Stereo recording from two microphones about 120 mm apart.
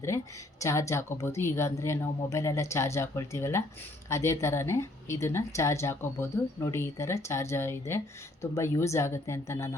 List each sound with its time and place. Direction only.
0.6 s a woman's voice: 25° left (ahead or behind)